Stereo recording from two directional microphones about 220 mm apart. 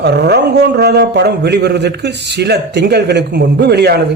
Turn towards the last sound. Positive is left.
turn(degrees=-50)  # may be behind; listen again after turning